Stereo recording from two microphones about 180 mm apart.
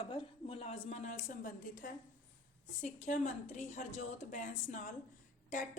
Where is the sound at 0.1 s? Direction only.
30° left (ahead or behind).